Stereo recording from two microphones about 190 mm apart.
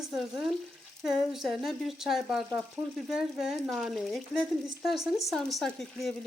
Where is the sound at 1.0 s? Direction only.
Centre (ahead or behind).